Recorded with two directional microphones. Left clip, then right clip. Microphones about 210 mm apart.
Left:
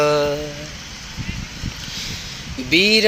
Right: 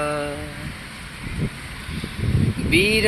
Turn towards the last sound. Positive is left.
turn(degrees=50)  # may be behind; listen again after turning